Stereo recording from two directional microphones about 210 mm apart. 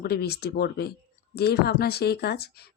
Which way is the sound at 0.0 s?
50° left (ahead or behind).